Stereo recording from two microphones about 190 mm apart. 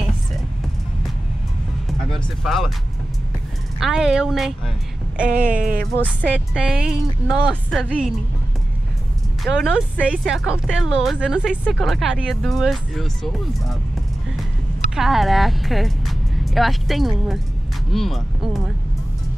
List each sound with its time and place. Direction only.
1.9 s speech: centre (ahead or behind)
3.8 s speech: 5° right (ahead or behind)
5.5 s speech: 45° right (ahead or behind)
6.0 s speech: 5° right (ahead or behind)
9.4 s speech: centre (ahead or behind)
15.0 s speech: centre (ahead or behind)